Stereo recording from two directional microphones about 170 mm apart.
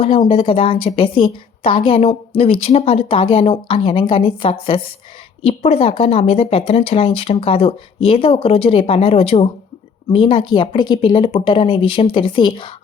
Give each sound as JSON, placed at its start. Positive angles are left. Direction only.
{"t": 0.0, "sound": "a woman's voice", "side_deg": 35}